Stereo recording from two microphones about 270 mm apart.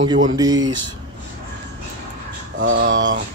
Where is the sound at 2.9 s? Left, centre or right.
Right.